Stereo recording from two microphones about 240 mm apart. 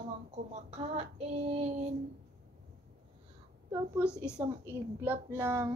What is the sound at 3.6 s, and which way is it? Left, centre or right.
A woman's voice, centre.